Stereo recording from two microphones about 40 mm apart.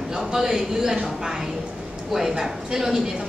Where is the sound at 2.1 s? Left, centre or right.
Centre.